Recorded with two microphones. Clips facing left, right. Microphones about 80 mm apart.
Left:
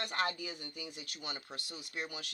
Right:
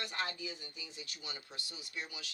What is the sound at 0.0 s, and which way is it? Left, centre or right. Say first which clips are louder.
Speech: left 4 dB; left.